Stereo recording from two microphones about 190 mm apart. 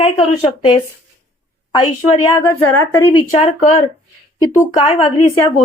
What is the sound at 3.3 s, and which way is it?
Speech, 40° left (ahead or behind).